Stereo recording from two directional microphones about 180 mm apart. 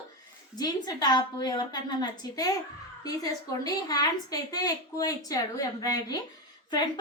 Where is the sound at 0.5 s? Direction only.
20° left (ahead or behind).